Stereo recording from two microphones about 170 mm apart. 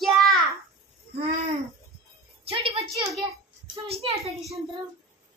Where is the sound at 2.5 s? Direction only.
30° right (ahead or behind).